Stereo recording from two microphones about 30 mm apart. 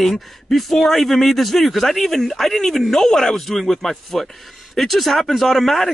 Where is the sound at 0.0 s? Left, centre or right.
Centre.